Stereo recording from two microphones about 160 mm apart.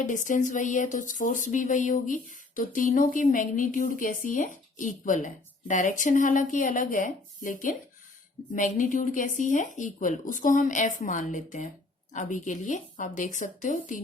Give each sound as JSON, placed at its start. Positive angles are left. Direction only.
{"t": 0.0, "sound": "speech", "side_deg": 50}